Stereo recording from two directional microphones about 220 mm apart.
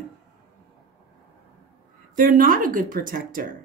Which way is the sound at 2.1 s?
35° right (ahead or behind).